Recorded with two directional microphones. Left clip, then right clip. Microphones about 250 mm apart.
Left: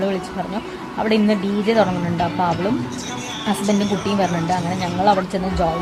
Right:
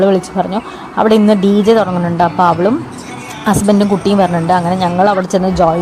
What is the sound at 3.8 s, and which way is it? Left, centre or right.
Speech, right.